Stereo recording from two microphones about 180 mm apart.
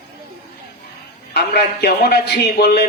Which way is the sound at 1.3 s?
65° left (ahead or behind).